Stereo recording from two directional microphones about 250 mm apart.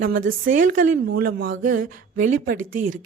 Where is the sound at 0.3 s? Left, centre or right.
Right.